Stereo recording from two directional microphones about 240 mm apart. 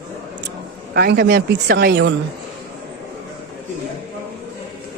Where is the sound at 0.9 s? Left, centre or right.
Right.